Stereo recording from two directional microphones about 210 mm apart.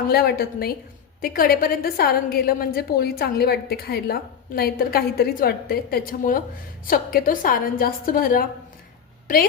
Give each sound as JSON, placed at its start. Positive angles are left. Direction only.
{"t": 0.1, "sound": "a woman's voice", "side_deg": 50}